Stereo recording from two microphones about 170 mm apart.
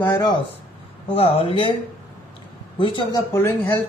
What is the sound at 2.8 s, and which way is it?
Speech, 30° left (ahead or behind).